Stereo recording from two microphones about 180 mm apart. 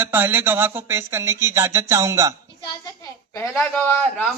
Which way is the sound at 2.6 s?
20° left (ahead or behind).